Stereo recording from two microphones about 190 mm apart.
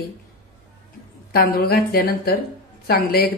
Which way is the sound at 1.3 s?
55° left (ahead or behind).